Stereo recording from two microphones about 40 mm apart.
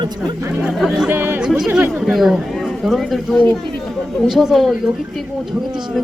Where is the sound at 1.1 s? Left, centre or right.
Right.